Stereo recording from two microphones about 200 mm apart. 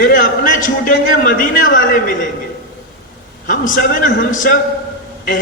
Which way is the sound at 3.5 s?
45° left (ahead or behind).